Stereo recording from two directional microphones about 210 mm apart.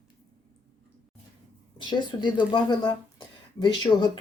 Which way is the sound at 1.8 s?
20° left (ahead or behind).